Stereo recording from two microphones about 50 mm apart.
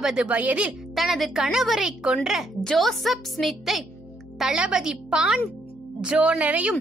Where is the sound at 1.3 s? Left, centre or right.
Centre.